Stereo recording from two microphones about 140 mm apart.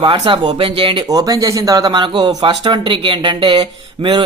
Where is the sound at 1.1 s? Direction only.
25° right (ahead or behind).